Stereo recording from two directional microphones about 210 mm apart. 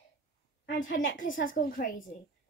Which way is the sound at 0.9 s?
40° left (ahead or behind).